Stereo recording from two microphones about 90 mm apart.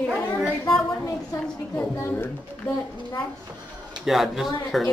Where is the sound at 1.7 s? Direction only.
25° left (ahead or behind).